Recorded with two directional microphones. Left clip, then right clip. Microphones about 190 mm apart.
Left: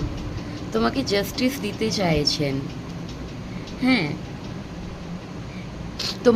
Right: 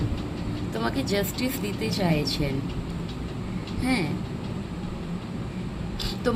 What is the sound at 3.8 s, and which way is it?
Speech, 30° left (ahead or behind).